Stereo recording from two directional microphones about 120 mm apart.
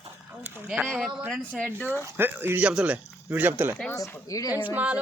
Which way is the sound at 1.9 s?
20° right (ahead or behind).